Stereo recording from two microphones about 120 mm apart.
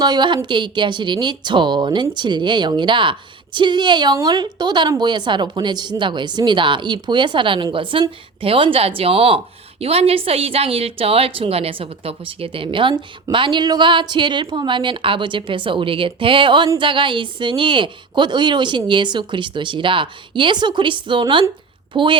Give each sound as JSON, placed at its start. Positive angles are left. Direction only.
{"t": 0.0, "sound": "a woman's voice", "side_deg": -40}